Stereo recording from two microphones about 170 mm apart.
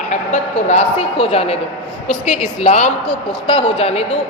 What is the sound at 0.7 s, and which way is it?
A woman's voice, 40° left (ahead or behind).